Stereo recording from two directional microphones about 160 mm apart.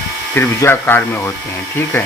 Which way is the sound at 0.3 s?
15° left (ahead or behind).